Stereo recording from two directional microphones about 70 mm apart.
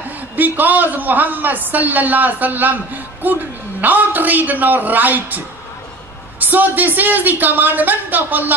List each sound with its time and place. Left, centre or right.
0.4 s a man's voice: right
6.4 s a man's voice: right